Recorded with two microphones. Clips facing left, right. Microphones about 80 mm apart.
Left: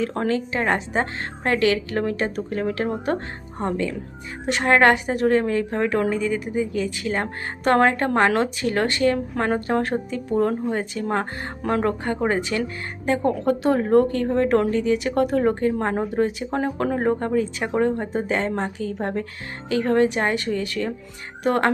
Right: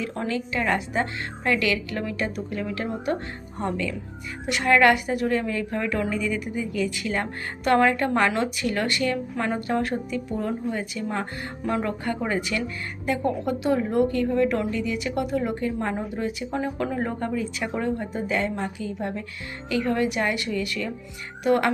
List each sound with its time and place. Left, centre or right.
0.0 s a woman's voice: left
6.1 s a woman's voice: left
9.1 s a woman's voice: left